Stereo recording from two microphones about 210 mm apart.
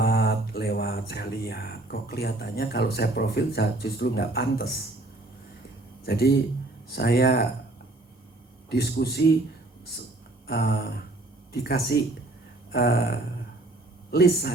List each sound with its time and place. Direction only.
0.0 s music: 50° left (ahead or behind)
6.1 s a man's voice: 50° left (ahead or behind)
8.7 s a man's voice: 50° left (ahead or behind)
10.4 s a man's voice: 50° left (ahead or behind)